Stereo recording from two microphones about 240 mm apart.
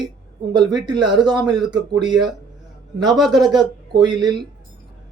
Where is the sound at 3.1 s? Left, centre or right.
Centre.